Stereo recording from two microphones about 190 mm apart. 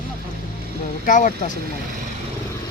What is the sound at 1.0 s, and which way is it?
Speech, 40° left (ahead or behind).